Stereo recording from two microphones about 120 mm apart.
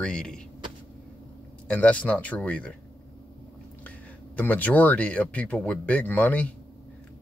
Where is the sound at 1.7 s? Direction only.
10° left (ahead or behind).